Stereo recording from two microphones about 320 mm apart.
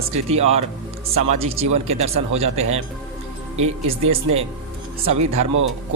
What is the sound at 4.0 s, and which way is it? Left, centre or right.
Speech, centre.